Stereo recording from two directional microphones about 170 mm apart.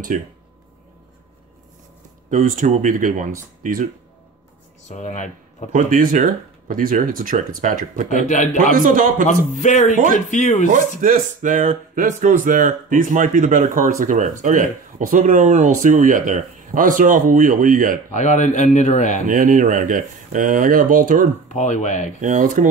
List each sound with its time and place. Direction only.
0.1 s speech: 45° right (ahead or behind)
2.3 s speech: 45° right (ahead or behind)
4.8 s speech: 45° left (ahead or behind)
5.7 s speech: 50° right (ahead or behind)
9.6 s a man's voice: 45° left (ahead or behind)
10.7 s speech: 50° right (ahead or behind)
18.1 s a man's voice: 45° left (ahead or behind)
19.2 s speech: 50° right (ahead or behind)
21.5 s a man's voice: 45° left (ahead or behind)
22.2 s speech: 50° right (ahead or behind)